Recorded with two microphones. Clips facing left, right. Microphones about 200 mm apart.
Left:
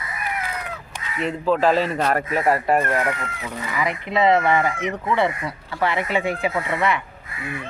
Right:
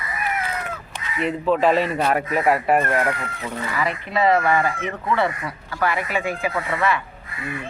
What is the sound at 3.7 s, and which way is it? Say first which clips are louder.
Speech: left 2 dB; 15° left (ahead or behind).